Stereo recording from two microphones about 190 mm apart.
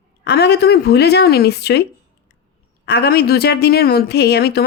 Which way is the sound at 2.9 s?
55° left (ahead or behind).